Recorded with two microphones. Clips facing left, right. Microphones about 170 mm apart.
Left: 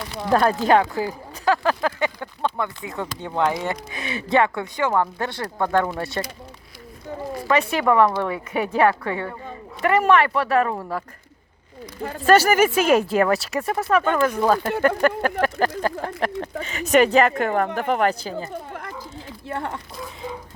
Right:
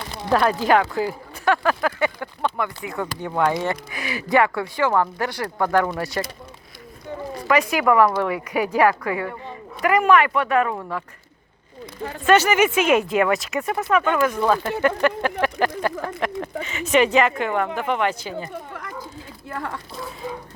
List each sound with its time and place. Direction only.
0.3 s speech: 40° left (ahead or behind)
0.7 s speech: 25° left (ahead or behind)
7.4 s speech: 30° left (ahead or behind)
12.0 s speech: 35° left (ahead or behind)
19.5 s speech: 25° left (ahead or behind)